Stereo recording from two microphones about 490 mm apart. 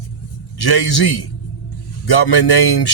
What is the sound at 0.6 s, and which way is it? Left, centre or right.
Speech, left.